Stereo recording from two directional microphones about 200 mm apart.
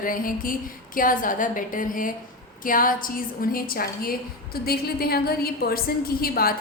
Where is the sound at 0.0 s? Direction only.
45° left (ahead or behind).